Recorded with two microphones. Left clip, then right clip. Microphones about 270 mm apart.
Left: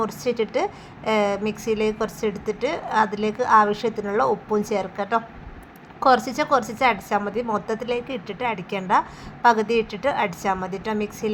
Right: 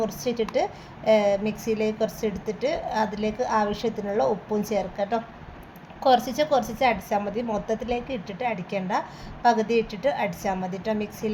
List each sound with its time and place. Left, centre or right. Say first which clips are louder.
0.0 s a woman's voice: left 3 dB; centre